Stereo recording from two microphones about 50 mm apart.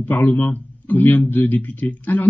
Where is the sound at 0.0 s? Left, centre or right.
Left.